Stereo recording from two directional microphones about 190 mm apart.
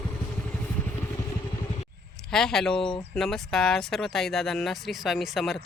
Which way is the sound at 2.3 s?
Centre (ahead or behind).